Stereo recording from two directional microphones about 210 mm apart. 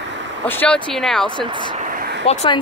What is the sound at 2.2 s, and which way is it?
Speech, 30° left (ahead or behind).